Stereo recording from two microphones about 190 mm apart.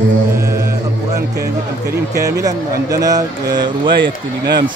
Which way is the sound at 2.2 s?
20° right (ahead or behind).